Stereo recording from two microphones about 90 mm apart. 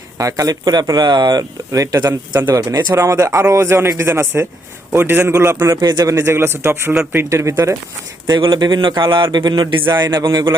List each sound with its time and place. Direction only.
0.2 s speech: 40° right (ahead or behind)
2.5 s a man's voice: 30° right (ahead or behind)
5.8 s speech: 45° right (ahead or behind)
6.1 s a man's voice: 25° right (ahead or behind)
8.4 s a man's voice: 60° right (ahead or behind)
9.8 s a man's voice: 25° right (ahead or behind)
10.1 s speech: 45° right (ahead or behind)